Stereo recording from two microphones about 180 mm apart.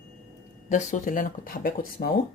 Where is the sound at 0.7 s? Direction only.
45° left (ahead or behind).